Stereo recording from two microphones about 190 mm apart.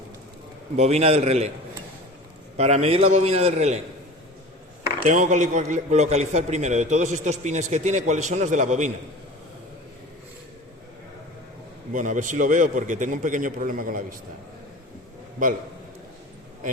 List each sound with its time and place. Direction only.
0.8 s a man's voice: 35° right (ahead or behind)
2.6 s a man's voice: 35° right (ahead or behind)
5.0 s a man's voice: 40° right (ahead or behind)
11.9 s a man's voice: 40° right (ahead or behind)